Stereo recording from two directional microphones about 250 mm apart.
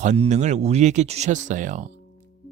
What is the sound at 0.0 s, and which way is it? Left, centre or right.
A man's voice, right.